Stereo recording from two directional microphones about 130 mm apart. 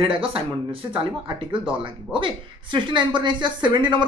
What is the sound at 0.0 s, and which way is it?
Speech, 45° right (ahead or behind).